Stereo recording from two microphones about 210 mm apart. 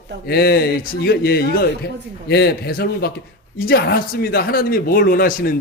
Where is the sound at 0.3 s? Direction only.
50° left (ahead or behind).